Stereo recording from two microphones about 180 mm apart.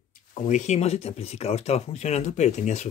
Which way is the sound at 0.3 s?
40° left (ahead or behind).